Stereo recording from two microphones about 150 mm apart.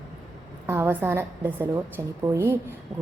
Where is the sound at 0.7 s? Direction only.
15° right (ahead or behind).